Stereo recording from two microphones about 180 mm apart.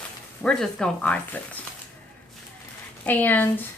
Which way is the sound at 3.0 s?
10° left (ahead or behind).